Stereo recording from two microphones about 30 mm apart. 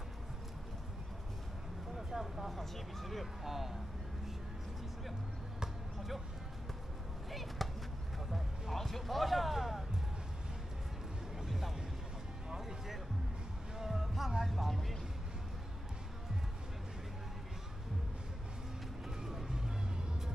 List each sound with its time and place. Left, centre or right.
2.0 s vehicle: centre
2.6 s speech: centre
3.4 s speech: centre
7.2 s chop: centre
8.7 s basketball bounce: centre
11.4 s music: centre
12.4 s basketball bounce: centre
13.7 s a sound: centre
14.4 s vehicle: centre
19.0 s vehicle: centre
19.5 s music: right